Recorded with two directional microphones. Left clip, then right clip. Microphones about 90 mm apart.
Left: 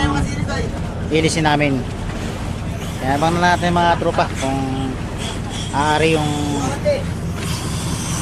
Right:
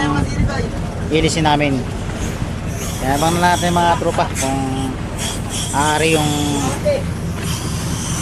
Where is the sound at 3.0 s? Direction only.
Centre (ahead or behind).